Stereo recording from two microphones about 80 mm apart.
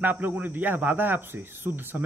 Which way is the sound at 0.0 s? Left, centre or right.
Right.